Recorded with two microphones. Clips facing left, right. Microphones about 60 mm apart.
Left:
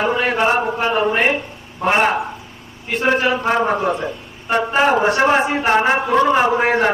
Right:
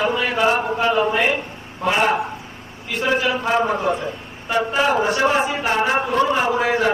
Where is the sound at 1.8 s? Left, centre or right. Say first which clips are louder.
Left 2 dB; left.